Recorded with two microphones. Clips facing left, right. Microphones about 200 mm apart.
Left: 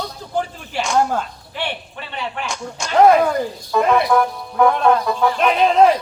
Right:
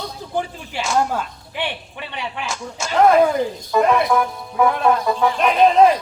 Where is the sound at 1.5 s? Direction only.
15° right (ahead or behind).